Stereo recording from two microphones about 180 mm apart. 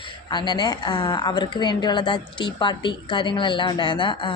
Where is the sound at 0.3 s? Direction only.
25° left (ahead or behind).